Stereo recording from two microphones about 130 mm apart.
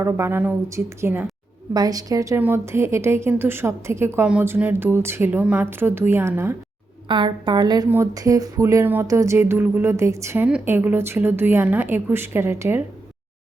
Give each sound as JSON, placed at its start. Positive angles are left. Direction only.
{"t": 0.0, "sound": "speech", "side_deg": -20}
{"t": 1.7, "sound": "a woman's voice", "side_deg": -30}
{"t": 7.1, "sound": "a woman's voice", "side_deg": -35}